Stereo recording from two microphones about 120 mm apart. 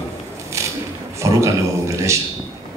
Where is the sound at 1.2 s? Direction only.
25° right (ahead or behind).